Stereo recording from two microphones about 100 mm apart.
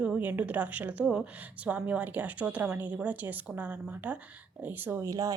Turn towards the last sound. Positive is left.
turn(degrees=-35)  # may be behind; listen again after turning